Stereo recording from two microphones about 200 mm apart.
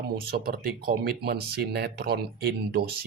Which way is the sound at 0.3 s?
50° right (ahead or behind).